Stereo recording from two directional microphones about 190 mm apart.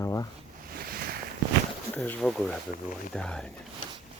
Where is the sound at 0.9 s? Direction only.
50° right (ahead or behind).